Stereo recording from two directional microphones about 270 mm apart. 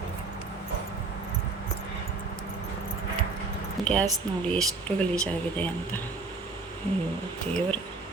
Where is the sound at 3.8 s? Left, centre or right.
Centre.